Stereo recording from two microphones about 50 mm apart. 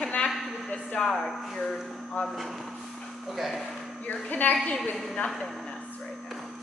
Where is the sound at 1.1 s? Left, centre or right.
Centre.